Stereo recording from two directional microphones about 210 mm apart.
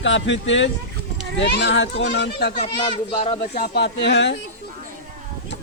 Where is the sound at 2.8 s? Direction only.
25° left (ahead or behind).